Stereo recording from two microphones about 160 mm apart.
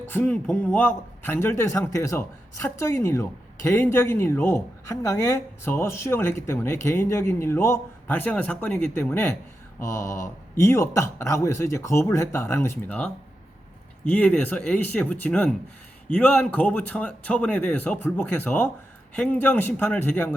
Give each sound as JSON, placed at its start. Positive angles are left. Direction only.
{"t": 0.0, "sound": "a man's voice", "side_deg": 10}